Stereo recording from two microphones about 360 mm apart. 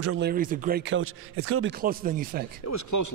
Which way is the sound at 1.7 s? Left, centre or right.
Right.